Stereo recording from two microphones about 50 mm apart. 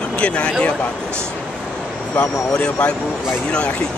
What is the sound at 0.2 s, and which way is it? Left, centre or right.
Speech, left.